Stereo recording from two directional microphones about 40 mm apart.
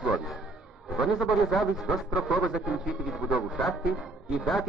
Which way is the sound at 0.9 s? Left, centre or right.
Centre.